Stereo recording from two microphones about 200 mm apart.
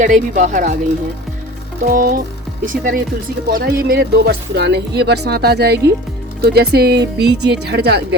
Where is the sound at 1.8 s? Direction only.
45° right (ahead or behind).